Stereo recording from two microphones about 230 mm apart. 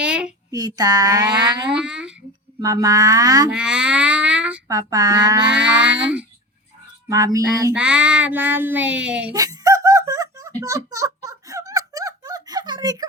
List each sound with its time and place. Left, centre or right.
0.0 s a sound: centre
0.5 s child singing: centre
1.7 s speech: centre
2.6 s child singing: centre
3.5 s speech: centre
4.7 s child singing: centre
5.5 s speech: centre
7.1 s child singing: centre
9.3 s wail: centre